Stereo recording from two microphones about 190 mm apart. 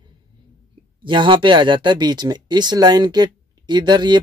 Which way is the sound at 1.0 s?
25° right (ahead or behind).